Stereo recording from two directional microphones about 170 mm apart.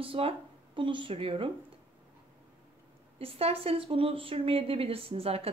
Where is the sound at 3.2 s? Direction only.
35° right (ahead or behind).